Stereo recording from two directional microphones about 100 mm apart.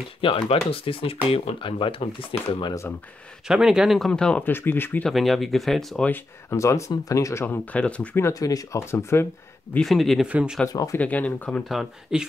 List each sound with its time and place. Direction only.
0.2 s speech: 65° left (ahead or behind)
3.4 s speech: 5° right (ahead or behind)
4.1 s speech: 10° left (ahead or behind)
4.5 s speech: 20° left (ahead or behind)
5.0 s speech: centre (ahead or behind)
6.5 s speech: 30° left (ahead or behind)
7.4 s speech: 15° left (ahead or behind)
8.2 s speech: 35° left (ahead or behind)
9.8 s speech: centre (ahead or behind)
10.2 s speech: 10° right (ahead or behind)
10.7 s speech: 40° left (ahead or behind)
11.0 s speech: 15° left (ahead or behind)
11.7 s speech: 5° right (ahead or behind)